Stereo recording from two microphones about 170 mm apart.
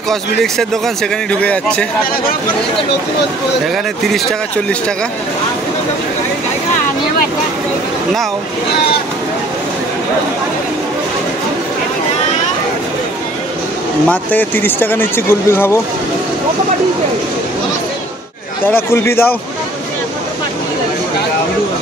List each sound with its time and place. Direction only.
0.1 s speech: centre (ahead or behind)
3.7 s speech: centre (ahead or behind)
14.0 s speech: 10° left (ahead or behind)
18.6 s speech: 10° left (ahead or behind)